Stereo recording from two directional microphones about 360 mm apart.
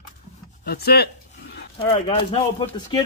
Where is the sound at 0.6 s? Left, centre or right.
Left.